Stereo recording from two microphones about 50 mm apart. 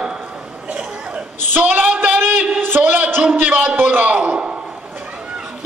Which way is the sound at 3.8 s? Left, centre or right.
Right.